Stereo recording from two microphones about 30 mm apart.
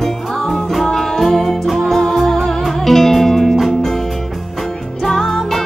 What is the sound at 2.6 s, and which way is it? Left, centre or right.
Music, centre.